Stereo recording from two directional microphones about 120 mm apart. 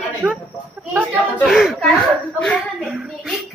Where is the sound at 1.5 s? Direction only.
Centre (ahead or behind).